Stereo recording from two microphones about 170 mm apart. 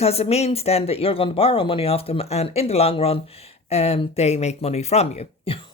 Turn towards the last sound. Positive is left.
turn(degrees=40)  # may be behind; listen again after turning